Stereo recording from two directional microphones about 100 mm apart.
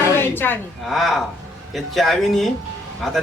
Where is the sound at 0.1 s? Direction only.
20° left (ahead or behind).